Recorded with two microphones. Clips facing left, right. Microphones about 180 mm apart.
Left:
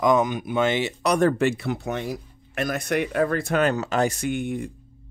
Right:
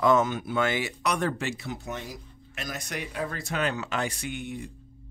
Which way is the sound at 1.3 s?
55° left (ahead or behind).